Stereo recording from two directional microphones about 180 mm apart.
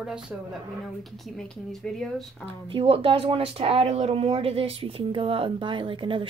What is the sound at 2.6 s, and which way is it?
Speech, 30° right (ahead or behind).